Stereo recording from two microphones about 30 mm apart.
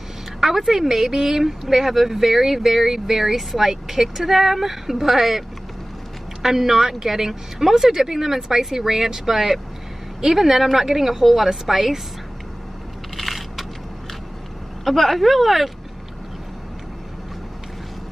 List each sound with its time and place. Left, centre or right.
0.4 s a woman's voice: centre
6.4 s speech: centre
13.1 s coin: centre
14.9 s speech: centre